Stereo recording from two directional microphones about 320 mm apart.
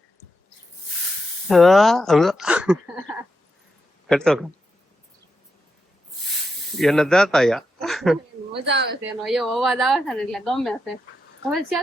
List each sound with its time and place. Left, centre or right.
1.5 s speech: centre
4.1 s speech: centre
6.7 s speech: centre
8.6 s speech: right
9.2 s speech: centre